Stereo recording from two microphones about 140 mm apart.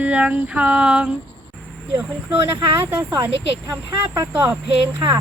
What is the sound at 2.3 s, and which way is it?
Speech, 40° right (ahead or behind).